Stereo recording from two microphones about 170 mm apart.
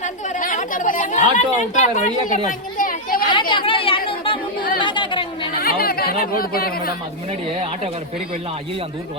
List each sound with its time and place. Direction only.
0.0 s chatter: 50° left (ahead or behind)
3.5 s chatter: 30° left (ahead or behind)
5.5 s speech: 60° left (ahead or behind)